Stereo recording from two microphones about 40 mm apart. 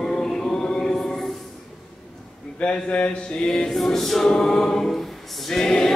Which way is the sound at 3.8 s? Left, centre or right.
Centre.